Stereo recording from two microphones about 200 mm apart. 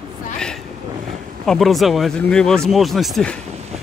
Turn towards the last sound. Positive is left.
turn(degrees=0)  # may be behind; listen again after turning